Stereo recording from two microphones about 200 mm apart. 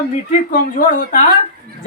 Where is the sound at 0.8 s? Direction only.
45° left (ahead or behind).